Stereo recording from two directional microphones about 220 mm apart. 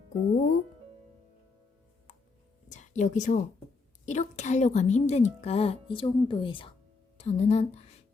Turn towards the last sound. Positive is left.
turn(degrees=30)  # may be behind; listen again after turning